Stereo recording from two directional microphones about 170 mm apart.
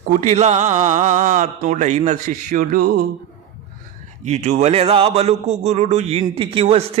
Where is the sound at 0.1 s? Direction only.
45° right (ahead or behind).